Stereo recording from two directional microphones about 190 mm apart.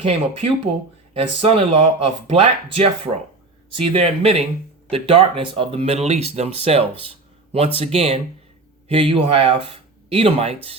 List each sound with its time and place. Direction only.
0.0 s speech: 30° right (ahead or behind)